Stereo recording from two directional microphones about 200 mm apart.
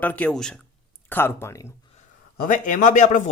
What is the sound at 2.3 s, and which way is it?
Speech, 40° left (ahead or behind).